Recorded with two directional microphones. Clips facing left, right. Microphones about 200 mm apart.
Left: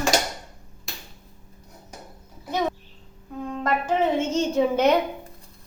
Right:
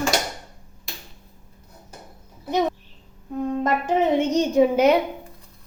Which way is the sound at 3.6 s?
15° right (ahead or behind).